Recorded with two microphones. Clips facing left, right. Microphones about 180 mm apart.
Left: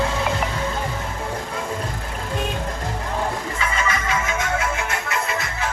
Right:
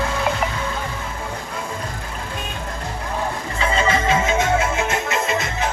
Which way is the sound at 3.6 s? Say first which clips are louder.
Right 7 dB; 30° right (ahead or behind).